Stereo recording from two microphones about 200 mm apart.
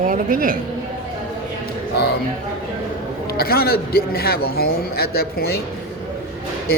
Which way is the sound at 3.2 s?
50° left (ahead or behind).